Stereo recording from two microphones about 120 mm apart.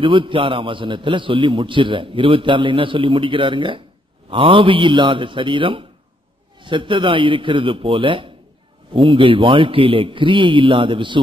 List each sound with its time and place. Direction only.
0.0 s a man's voice: 45° right (ahead or behind)